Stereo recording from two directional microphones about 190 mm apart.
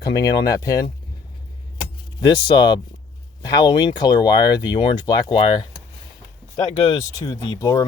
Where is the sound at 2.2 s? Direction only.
25° left (ahead or behind).